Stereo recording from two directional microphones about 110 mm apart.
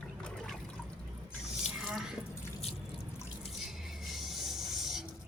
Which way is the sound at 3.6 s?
5° right (ahead or behind).